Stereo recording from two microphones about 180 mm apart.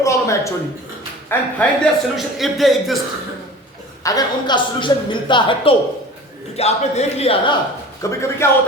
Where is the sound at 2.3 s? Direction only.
Centre (ahead or behind).